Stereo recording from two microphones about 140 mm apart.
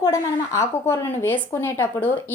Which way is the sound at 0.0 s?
20° left (ahead or behind).